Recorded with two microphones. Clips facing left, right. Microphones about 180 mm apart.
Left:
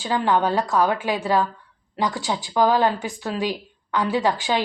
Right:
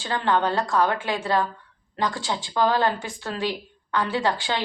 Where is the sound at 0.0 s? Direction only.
15° left (ahead or behind).